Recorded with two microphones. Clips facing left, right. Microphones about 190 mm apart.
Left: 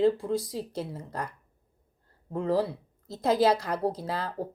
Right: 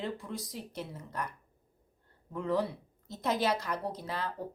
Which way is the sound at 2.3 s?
35° left (ahead or behind).